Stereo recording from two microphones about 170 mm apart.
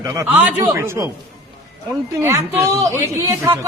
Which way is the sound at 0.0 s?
20° right (ahead or behind).